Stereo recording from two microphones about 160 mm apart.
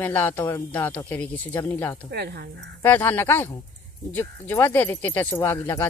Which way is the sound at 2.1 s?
90° right.